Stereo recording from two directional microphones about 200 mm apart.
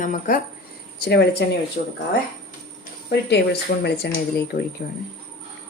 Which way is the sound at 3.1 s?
55° left (ahead or behind).